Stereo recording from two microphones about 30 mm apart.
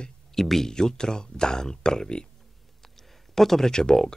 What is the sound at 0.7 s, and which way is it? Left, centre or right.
Speech, left.